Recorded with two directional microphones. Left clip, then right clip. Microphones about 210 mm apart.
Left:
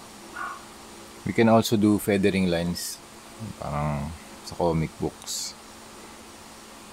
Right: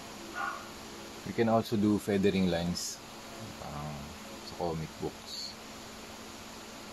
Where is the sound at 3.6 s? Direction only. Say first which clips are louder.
Left 14 dB; 50° left (ahead or behind).